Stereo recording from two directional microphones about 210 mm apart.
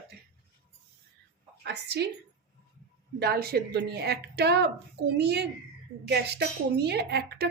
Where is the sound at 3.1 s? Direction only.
45° right (ahead or behind).